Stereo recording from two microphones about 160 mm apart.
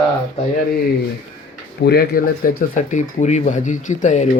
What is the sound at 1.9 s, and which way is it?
Speech, 75° left (ahead or behind).